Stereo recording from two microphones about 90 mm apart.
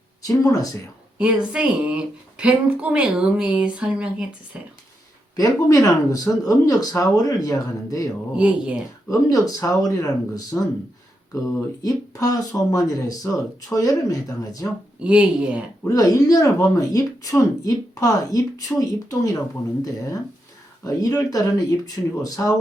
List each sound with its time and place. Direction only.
0.3 s speech: 40° left (ahead or behind)
1.2 s speech: 10° right (ahead or behind)
5.4 s speech: 40° left (ahead or behind)
8.4 s speech: 10° right (ahead or behind)
9.0 s speech: 40° left (ahead or behind)
11.8 s speech: 40° left (ahead or behind)
15.0 s speech: 10° right (ahead or behind)
15.9 s speech: 40° left (ahead or behind)
20.8 s speech: 40° left (ahead or behind)